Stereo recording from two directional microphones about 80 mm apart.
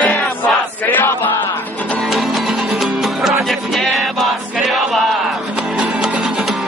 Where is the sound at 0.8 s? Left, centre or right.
Left.